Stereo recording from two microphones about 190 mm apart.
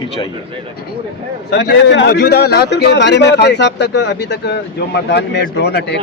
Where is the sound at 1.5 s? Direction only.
60° left (ahead or behind).